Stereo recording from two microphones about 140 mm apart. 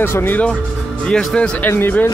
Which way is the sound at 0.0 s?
15° left (ahead or behind).